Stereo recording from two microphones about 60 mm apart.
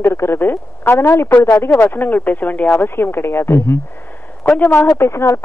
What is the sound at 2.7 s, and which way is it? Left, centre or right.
A woman's voice, left.